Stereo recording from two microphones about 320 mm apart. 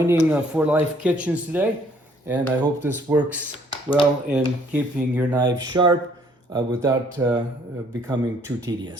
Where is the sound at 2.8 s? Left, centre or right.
Centre.